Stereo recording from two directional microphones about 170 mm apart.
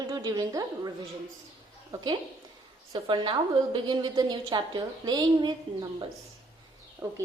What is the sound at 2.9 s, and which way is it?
A woman's voice, 30° right (ahead or behind).